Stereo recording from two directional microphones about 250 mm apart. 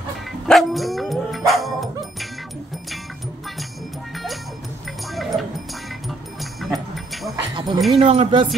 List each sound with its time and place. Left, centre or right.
0.5 s dog: centre
5.0 s a sound: centre
6.0 s music: centre
7.5 s dog: centre
8.0 s speech: right